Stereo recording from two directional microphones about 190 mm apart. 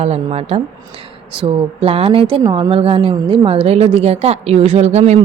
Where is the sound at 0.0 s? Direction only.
35° right (ahead or behind).